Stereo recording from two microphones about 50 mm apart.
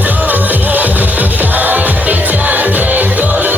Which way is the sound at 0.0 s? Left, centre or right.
Right.